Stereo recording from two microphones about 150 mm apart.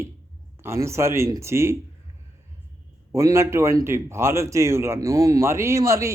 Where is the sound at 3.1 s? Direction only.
20° right (ahead or behind).